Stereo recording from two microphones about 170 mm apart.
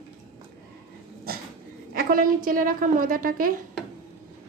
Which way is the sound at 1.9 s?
55° right (ahead or behind).